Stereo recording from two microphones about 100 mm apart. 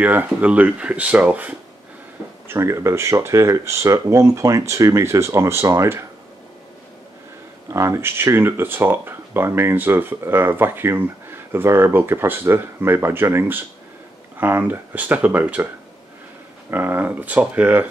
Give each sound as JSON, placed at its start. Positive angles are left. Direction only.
{"t": 0.0, "sound": "speech", "side_deg": -15}
{"t": 2.4, "sound": "speech", "side_deg": -25}
{"t": 7.7, "sound": "speech", "side_deg": -30}
{"t": 16.7, "sound": "speech", "side_deg": -20}